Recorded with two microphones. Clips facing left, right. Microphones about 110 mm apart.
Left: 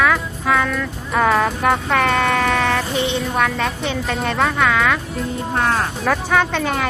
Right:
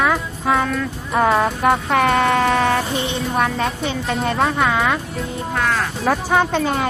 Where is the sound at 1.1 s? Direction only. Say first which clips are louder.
Even; 20° right (ahead or behind).